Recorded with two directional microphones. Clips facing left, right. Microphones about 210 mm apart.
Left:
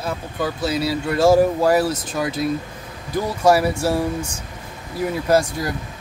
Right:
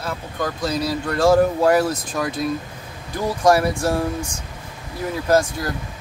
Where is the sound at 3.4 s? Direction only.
5° left (ahead or behind).